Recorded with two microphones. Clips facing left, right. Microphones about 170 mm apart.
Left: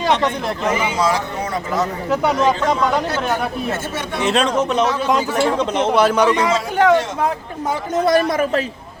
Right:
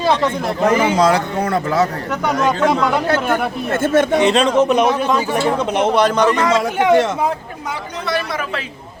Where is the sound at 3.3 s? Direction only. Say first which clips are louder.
Right 2 dB; 55° right (ahead or behind).